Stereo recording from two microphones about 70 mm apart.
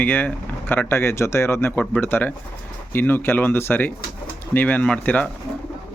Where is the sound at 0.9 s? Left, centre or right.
Left.